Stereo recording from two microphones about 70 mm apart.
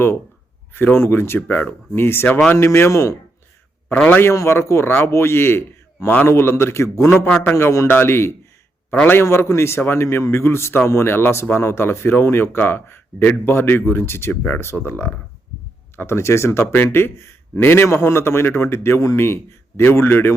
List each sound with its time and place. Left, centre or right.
0.7 s a man's voice: left
1.5 s speech: left
1.9 s a man's voice: left
3.9 s speech: centre
4.2 s a man's voice: left
7.9 s a man's voice: left